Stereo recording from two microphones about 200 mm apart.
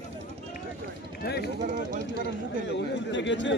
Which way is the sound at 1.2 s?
55° left (ahead or behind).